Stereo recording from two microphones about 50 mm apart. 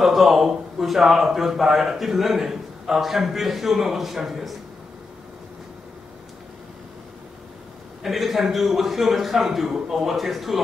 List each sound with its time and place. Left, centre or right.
0.0 s a man's voice: centre
8.0 s a man's voice: centre